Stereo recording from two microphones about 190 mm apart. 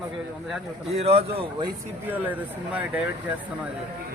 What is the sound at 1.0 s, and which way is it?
Speech, 30° right (ahead or behind).